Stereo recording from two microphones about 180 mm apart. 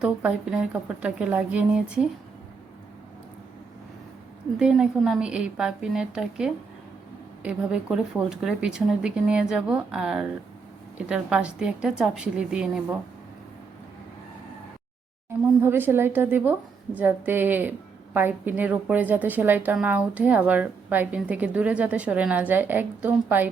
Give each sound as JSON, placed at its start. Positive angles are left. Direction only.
{"t": 0.0, "sound": "a woman's voice", "side_deg": -5}
{"t": 4.5, "sound": "speech", "side_deg": -5}
{"t": 15.3, "sound": "a woman's voice", "side_deg": -15}